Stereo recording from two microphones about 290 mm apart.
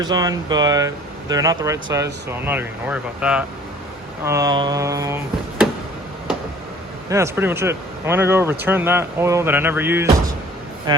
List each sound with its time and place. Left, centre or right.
0.0 s speech: centre
7.1 s speech: centre